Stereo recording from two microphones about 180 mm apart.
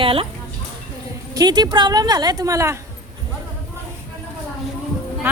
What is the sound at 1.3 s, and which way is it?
A woman's voice, 20° right (ahead or behind).